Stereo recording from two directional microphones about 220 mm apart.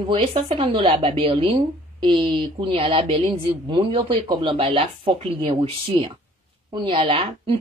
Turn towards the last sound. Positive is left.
turn(degrees=-25)  # may be behind; listen again after turning